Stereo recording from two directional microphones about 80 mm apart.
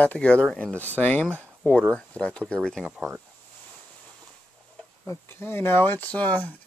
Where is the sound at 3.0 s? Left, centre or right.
Right.